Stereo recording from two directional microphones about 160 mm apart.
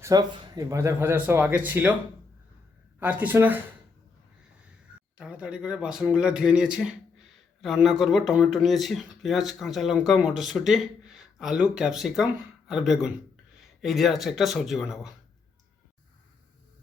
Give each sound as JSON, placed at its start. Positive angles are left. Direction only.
{"t": 0.0, "sound": "speech", "side_deg": -20}
{"t": 3.0, "sound": "speech", "side_deg": -10}
{"t": 5.1, "sound": "speech", "side_deg": -5}